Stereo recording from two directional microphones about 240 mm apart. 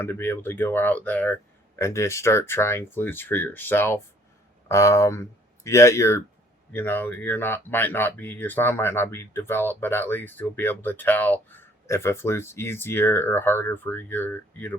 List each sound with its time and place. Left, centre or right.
0.0 s speech: centre